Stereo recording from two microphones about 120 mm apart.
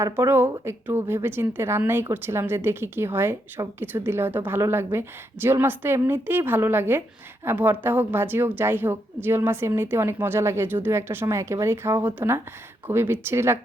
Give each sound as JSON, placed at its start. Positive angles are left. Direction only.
{"t": 0.0, "sound": "speech", "side_deg": -20}